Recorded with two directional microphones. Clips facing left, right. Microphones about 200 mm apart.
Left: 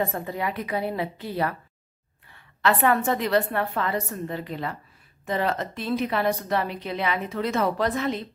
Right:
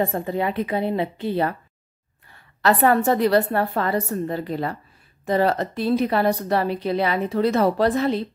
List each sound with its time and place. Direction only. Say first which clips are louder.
0.0 s a woman's voice: right 5 dB; 30° right (ahead or behind)
2.3 s a woman's voice: right 3 dB; 40° right (ahead or behind)